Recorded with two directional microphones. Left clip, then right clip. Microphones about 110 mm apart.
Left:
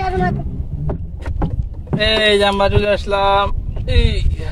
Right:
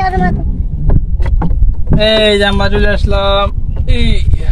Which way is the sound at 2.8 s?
90° left.